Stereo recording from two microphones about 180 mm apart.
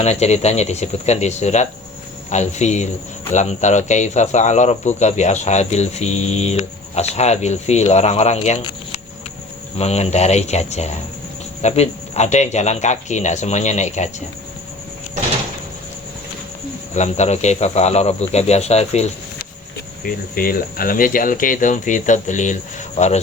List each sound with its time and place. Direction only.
0.0 s speech: 35° left (ahead or behind)
16.9 s speech: 40° left (ahead or behind)
20.1 s speech: 55° left (ahead or behind)